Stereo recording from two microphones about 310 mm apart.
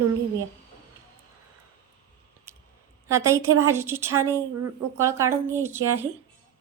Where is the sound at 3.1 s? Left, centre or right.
Centre.